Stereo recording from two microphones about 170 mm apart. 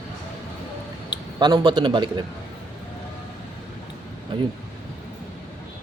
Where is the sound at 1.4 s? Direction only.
25° right (ahead or behind).